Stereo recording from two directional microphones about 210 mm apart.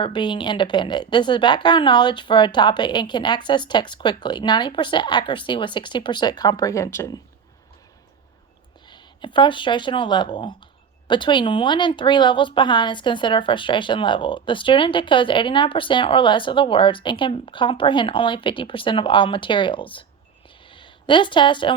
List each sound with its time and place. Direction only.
0.0 s speech: 20° left (ahead or behind)
8.9 s speech: 20° left (ahead or behind)
20.7 s a sound: 25° left (ahead or behind)